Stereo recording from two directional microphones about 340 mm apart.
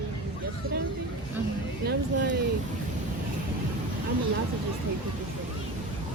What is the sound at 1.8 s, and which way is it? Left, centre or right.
Speech, right.